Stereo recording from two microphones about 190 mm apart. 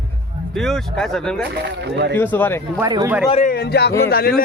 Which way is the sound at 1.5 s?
60° right (ahead or behind).